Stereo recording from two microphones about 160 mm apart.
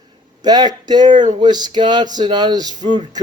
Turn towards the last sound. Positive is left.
turn(degrees=-30)  # may be behind; listen again after turning